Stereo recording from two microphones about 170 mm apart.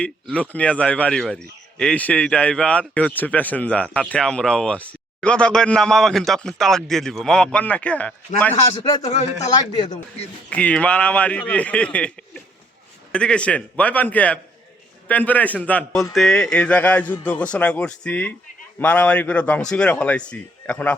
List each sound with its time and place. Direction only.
0.0 s a man's voice: 5° left (ahead or behind)
8.5 s a man's voice: 40° left (ahead or behind)
9.7 s speech: 25° left (ahead or behind)
10.5 s a man's voice: 10° left (ahead or behind)